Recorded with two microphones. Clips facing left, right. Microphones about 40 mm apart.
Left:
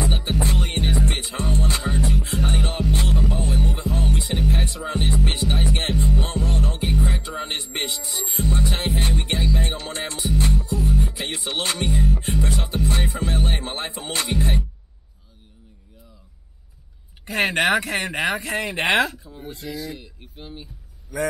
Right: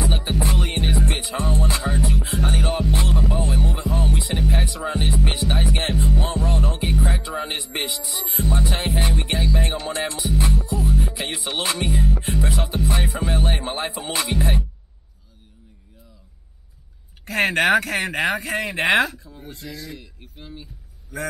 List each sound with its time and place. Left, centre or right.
0.3 s music: centre
17.3 s speech: centre
19.1 s speech: centre
20.3 s a sound: centre